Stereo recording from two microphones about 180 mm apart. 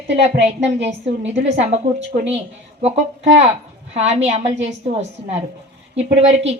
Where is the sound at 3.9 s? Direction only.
35° right (ahead or behind).